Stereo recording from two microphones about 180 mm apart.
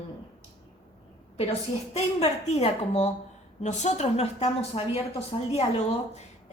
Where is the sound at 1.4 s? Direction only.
35° left (ahead or behind).